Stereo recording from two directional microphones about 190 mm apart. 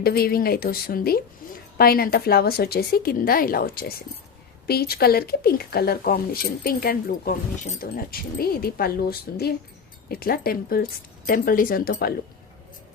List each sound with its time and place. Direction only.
0.0 s speech: 55° left (ahead or behind)
1.4 s a sound: 50° left (ahead or behind)
1.8 s speech: 50° left (ahead or behind)